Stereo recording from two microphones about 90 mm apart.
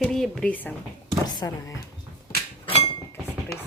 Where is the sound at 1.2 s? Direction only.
50° left (ahead or behind).